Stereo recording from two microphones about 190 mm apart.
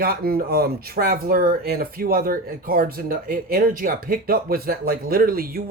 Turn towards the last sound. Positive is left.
turn(degrees=-50)  # may be behind; listen again after turning